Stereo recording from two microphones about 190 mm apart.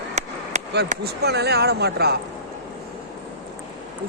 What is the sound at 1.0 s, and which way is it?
Speech, 60° right (ahead or behind).